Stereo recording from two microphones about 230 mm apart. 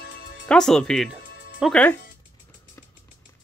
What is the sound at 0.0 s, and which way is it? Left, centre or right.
Music, left.